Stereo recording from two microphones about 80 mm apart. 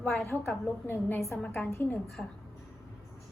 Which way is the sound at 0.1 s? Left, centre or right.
Left.